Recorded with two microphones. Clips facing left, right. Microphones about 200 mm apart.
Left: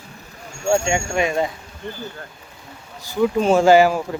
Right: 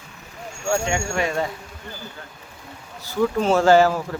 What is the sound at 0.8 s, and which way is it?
Speech, 15° left (ahead or behind).